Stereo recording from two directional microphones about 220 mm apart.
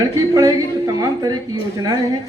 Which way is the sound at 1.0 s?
15° right (ahead or behind).